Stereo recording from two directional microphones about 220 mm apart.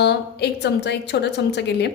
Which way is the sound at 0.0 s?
50° left (ahead or behind).